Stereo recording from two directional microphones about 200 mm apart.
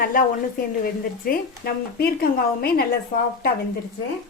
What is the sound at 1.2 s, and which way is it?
A woman's voice, 50° left (ahead or behind).